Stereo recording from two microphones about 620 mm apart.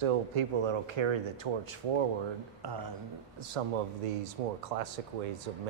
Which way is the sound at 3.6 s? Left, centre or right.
Right.